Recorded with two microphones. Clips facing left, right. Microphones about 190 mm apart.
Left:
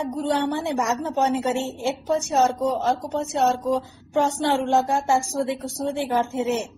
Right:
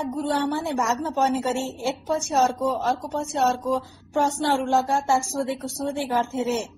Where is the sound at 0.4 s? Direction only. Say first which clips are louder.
Left 1 dB; 20° left (ahead or behind).